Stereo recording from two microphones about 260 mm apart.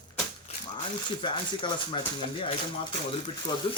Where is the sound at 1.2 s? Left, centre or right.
Centre.